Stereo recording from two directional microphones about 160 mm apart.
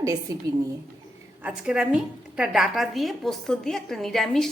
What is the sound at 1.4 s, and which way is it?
A woman's voice, 5° right (ahead or behind).